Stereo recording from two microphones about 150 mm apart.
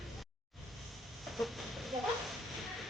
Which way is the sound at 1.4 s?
Centre (ahead or behind).